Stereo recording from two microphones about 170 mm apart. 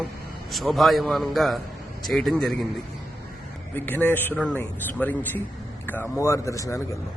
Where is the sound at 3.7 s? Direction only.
10° left (ahead or behind).